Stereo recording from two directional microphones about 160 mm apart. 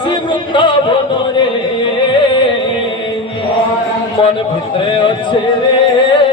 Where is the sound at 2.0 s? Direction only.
30° left (ahead or behind).